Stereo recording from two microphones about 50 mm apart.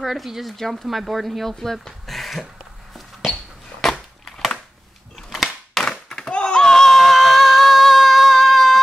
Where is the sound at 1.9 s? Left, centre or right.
Centre.